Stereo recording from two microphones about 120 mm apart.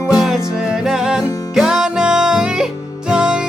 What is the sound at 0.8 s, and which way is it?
Music, 5° right (ahead or behind).